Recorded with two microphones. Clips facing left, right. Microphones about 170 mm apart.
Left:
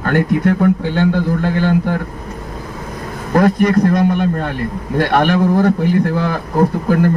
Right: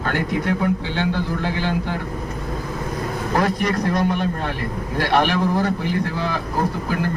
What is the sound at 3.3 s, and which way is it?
A man's voice, 50° left (ahead or behind).